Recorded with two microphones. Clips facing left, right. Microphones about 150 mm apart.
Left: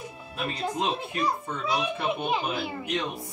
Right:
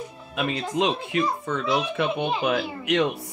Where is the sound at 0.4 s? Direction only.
90° right.